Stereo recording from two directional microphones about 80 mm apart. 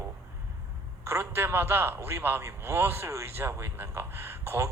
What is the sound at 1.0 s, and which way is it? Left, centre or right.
A man's voice, right.